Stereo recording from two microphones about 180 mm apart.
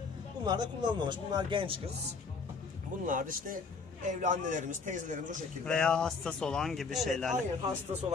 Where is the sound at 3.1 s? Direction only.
50° right (ahead or behind).